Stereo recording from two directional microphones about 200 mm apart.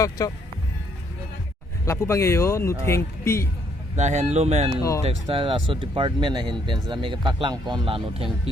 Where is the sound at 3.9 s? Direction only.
35° right (ahead or behind).